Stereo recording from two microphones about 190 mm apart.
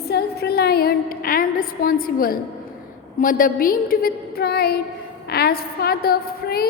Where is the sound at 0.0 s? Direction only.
55° left (ahead or behind).